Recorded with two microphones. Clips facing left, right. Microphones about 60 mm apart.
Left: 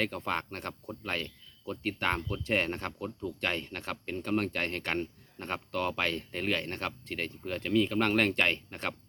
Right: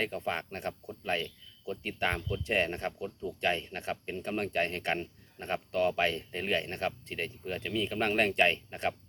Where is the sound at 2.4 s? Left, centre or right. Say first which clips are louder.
Right 2 dB; left.